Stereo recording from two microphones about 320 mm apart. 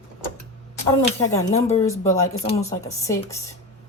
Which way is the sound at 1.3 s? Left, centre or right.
Centre.